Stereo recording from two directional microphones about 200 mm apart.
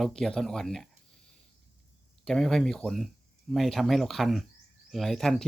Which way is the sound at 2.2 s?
Centre (ahead or behind).